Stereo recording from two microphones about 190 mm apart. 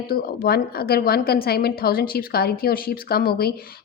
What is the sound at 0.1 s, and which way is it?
A woman's voice, 55° left (ahead or behind).